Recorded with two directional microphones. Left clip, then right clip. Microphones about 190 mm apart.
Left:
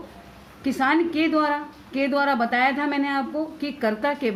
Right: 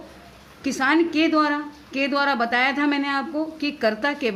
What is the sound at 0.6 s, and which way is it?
A woman's voice, 25° right (ahead or behind).